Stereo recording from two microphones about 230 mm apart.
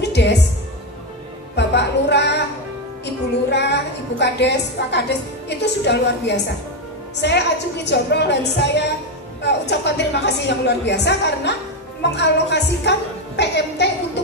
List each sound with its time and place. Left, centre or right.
0.0 s music: left
1.6 s music: left
3.4 s a woman's voice: left
14.2 s a sound: left